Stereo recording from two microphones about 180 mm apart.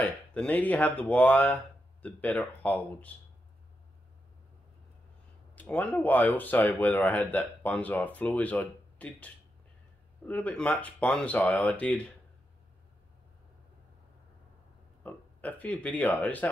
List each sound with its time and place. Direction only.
0.0 s speech: 10° left (ahead or behind)
5.6 s speech: 10° left (ahead or behind)
15.0 s speech: 10° left (ahead or behind)